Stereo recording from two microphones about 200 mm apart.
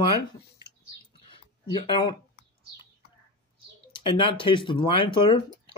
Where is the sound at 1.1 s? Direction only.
25° left (ahead or behind).